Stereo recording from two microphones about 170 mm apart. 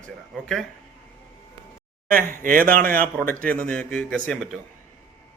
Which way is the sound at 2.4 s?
55° right (ahead or behind).